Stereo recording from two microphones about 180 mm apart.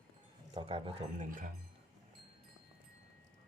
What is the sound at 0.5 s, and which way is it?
Speech, 30° right (ahead or behind).